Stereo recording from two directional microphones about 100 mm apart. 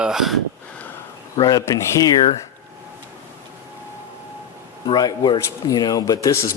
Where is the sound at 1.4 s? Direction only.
40° left (ahead or behind).